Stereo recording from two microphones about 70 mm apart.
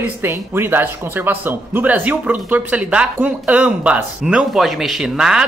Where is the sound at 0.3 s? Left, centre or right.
Right; by 4.5 s centre.